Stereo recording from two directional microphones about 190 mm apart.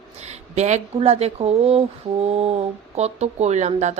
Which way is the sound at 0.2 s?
35° right (ahead or behind).